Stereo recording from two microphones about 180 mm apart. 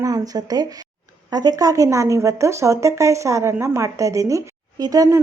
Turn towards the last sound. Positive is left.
turn(degrees=-20)  # may be behind; listen again after turning